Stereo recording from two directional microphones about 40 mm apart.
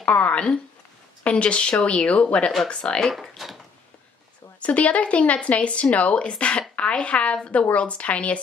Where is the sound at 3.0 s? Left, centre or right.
Centre.